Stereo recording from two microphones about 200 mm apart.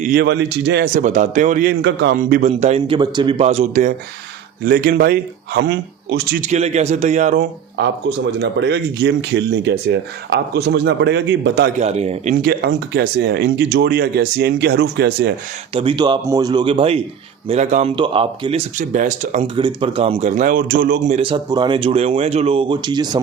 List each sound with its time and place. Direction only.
0.2 s speech: 60° right (ahead or behind)
0.9 s speech: 40° right (ahead or behind)
1.8 s speech: 60° right (ahead or behind)
2.1 s speech: 40° right (ahead or behind)
4.6 s a man's voice: 50° right (ahead or behind)
6.4 s speech: 35° right (ahead or behind)
7.8 s speech: 60° right (ahead or behind)
11.8 s speech: 35° right (ahead or behind)
12.4 s speech: 55° right (ahead or behind)
15.7 s speech: 25° right (ahead or behind)
17.9 s speech: 25° right (ahead or behind)
19.5 s speech: 25° right (ahead or behind)